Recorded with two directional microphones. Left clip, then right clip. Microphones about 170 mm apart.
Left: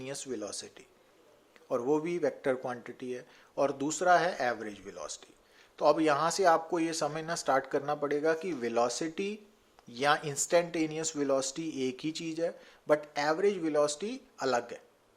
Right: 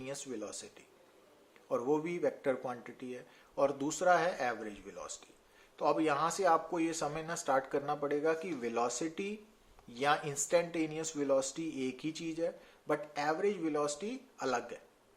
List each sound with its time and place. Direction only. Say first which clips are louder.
0.0 s speech: left 4 dB; 30° left (ahead or behind)